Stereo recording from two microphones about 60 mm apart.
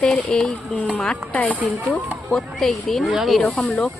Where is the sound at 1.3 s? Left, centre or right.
Left.